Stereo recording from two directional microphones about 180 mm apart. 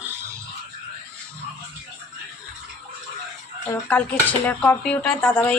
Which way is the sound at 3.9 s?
10° left (ahead or behind).